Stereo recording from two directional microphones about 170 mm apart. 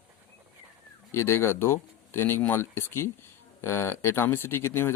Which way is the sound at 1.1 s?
15° left (ahead or behind).